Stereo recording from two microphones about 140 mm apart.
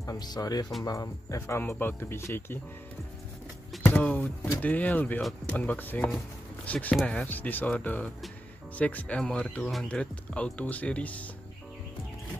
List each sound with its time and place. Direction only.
0.0 s speech: 25° left (ahead or behind)
3.8 s a sound: 10° left (ahead or behind)
4.6 s speech: 10° left (ahead or behind)